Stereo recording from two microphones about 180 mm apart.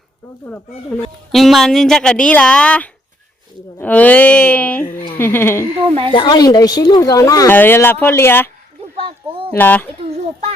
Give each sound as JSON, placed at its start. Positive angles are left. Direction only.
{"t": 1.3, "sound": "speech", "side_deg": 0}
{"t": 5.8, "sound": "a woman's voice", "side_deg": -30}
{"t": 6.1, "sound": "speech", "side_deg": 25}
{"t": 9.0, "sound": "a sound", "side_deg": -30}
{"t": 9.6, "sound": "speech", "side_deg": 10}
{"t": 10.0, "sound": "a sound", "side_deg": -35}